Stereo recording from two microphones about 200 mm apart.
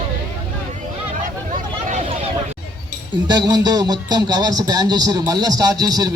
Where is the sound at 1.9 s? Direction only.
30° right (ahead or behind).